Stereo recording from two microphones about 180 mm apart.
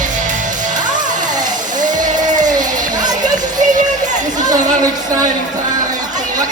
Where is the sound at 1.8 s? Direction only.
45° right (ahead or behind).